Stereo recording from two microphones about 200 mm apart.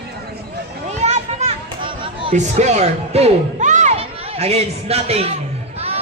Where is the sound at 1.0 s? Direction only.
35° right (ahead or behind).